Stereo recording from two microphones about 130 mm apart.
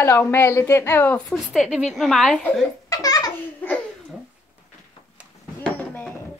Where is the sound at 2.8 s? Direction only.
25° left (ahead or behind).